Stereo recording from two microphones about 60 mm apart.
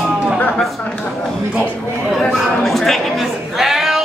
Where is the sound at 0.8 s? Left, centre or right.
Centre.